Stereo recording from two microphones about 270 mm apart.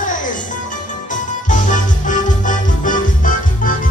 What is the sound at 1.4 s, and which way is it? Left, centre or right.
Music, left.